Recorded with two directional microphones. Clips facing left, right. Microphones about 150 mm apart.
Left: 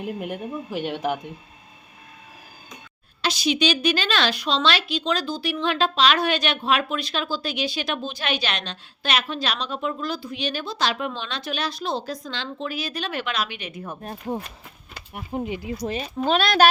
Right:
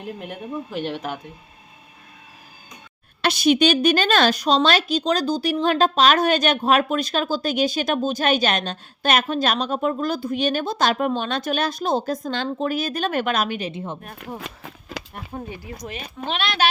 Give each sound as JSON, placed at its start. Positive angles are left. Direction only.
{"t": 0.0, "sound": "speech", "side_deg": 5}
{"t": 3.2, "sound": "a woman's voice", "side_deg": -55}
{"t": 13.7, "sound": "speech", "side_deg": -25}
{"t": 14.4, "sound": "a sound", "side_deg": -90}
{"t": 15.1, "sound": "speech", "side_deg": 15}
{"t": 15.9, "sound": "speech", "side_deg": 35}